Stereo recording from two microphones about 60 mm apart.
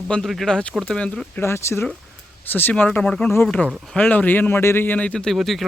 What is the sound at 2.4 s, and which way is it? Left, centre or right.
Speech, left.